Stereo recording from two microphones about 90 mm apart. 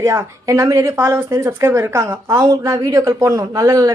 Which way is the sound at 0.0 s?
35° right (ahead or behind).